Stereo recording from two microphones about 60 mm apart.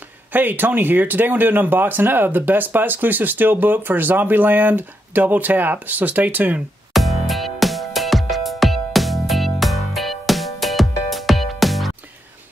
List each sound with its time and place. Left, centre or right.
0.3 s speech: right
6.9 s music: centre